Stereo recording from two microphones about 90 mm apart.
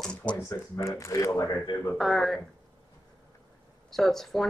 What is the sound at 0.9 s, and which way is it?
Speech, 35° left (ahead or behind).